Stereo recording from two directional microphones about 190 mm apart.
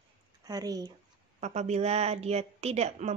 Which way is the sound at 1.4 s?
35° right (ahead or behind).